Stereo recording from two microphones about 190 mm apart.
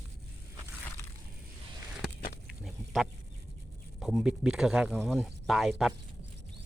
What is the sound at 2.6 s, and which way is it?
Speech, centre (ahead or behind).